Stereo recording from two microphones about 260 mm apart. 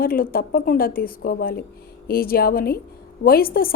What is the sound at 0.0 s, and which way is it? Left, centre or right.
A woman's voice, left.